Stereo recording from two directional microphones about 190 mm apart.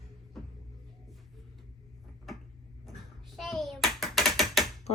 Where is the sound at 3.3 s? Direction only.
Centre (ahead or behind).